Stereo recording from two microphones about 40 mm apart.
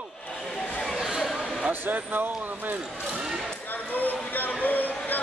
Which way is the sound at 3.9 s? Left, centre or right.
Left.